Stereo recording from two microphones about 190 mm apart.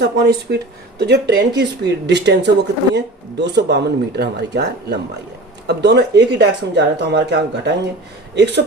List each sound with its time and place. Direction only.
0.0 s speech: 60° right (ahead or behind)